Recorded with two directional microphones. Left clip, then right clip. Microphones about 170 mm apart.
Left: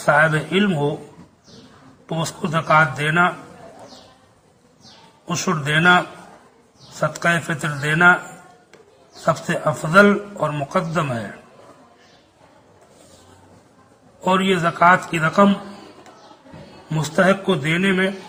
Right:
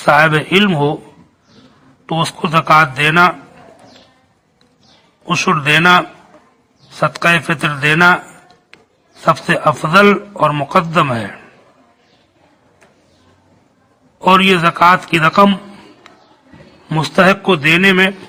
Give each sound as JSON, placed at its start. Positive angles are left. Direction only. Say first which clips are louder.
{"t": 0.0, "sound": "a man's voice", "louder": "right 6 dB", "side_deg": -25}
{"t": 2.0, "sound": "a man's voice", "louder": "right 8 dB", "side_deg": -25}
{"t": 5.2, "sound": "a man's voice", "louder": "right 9 dB", "side_deg": -25}
{"t": 7.0, "sound": "a man's voice", "louder": "right 7 dB", "side_deg": -25}
{"t": 9.2, "sound": "a man's voice", "louder": "right 8 dB", "side_deg": -25}
{"t": 14.3, "sound": "a man's voice", "louder": "right 9 dB", "side_deg": -25}
{"t": 16.9, "sound": "a man's voice", "louder": "right 6 dB", "side_deg": -25}